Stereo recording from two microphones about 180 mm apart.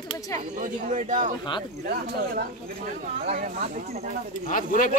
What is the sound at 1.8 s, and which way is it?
Speech, 55° right (ahead or behind).